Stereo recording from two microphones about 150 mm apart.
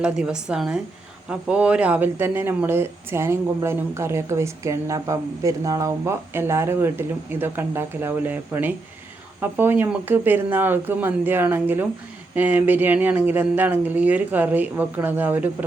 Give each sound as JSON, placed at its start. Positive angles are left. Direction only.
{"t": 0.0, "sound": "a woman's voice", "side_deg": -5}